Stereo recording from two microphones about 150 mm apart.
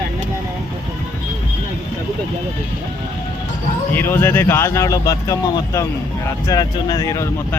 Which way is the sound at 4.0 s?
15° left (ahead or behind).